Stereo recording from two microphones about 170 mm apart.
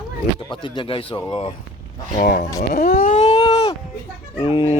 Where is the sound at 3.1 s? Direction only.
40° left (ahead or behind).